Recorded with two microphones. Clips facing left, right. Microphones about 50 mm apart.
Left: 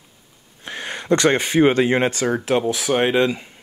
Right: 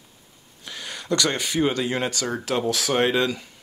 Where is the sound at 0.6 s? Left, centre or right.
Left.